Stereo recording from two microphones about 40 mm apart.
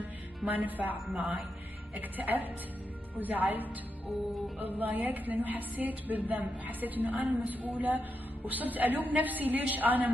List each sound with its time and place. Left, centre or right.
0.5 s a woman's voice: right